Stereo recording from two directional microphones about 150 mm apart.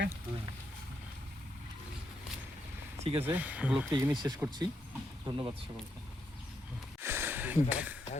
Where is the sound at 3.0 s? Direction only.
40° right (ahead or behind).